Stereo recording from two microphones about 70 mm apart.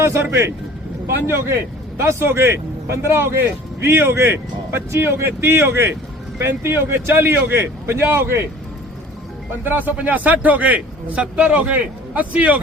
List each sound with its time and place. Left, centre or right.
0.0 s a man's voice: right
9.6 s a man's voice: right